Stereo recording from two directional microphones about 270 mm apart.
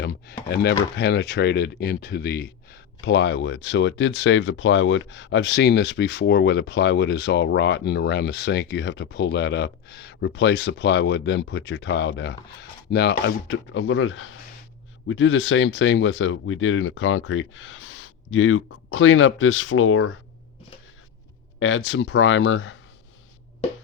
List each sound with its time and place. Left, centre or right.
0.0 s speech: left
21.6 s speech: left